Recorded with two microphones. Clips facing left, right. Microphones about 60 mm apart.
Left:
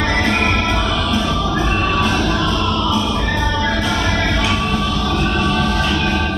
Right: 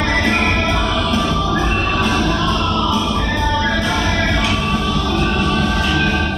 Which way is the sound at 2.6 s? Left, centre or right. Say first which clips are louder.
Even; centre.